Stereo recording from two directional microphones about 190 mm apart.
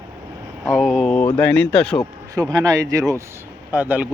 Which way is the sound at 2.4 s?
20° right (ahead or behind).